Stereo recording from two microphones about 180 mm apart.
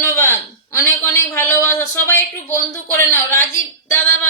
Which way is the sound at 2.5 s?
10° left (ahead or behind).